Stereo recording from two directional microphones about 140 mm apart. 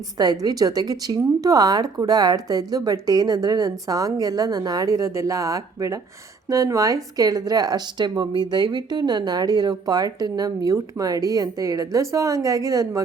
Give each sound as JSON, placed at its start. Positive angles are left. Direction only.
{"t": 0.2, "sound": "speech", "side_deg": -25}